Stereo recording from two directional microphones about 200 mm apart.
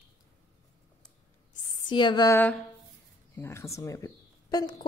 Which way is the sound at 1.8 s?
25° left (ahead or behind).